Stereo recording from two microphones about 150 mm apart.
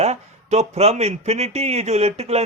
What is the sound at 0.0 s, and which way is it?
Speech, 50° right (ahead or behind).